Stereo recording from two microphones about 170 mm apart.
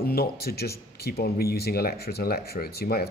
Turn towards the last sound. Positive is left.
turn(degrees=65)  # may be behind; listen again after turning